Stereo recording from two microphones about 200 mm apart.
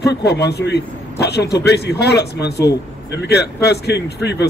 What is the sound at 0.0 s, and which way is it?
A man's voice, 55° left (ahead or behind).